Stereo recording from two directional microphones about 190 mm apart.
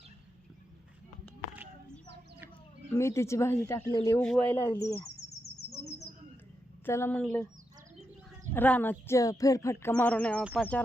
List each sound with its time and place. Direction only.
2.9 s speech: 15° left (ahead or behind)
4.2 s speech: 5° left (ahead or behind)
6.8 s speech: 10° left (ahead or behind)
8.5 s speech: 10° left (ahead or behind)